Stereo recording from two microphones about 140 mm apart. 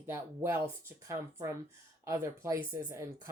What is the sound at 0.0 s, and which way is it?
Speech, 15° right (ahead or behind).